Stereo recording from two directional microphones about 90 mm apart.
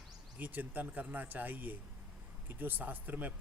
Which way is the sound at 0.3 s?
20° right (ahead or behind).